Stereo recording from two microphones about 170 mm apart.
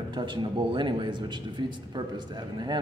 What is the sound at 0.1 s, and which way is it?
Speech, 25° right (ahead or behind).